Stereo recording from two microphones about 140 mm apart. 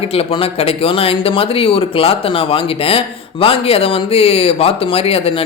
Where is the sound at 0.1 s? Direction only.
45° left (ahead or behind).